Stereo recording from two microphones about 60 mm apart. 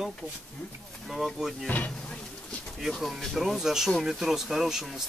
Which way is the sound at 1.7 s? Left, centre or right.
Left.